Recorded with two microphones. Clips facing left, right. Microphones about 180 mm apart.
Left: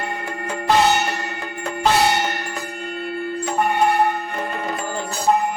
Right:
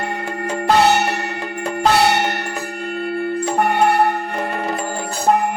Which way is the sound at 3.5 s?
65° right (ahead or behind).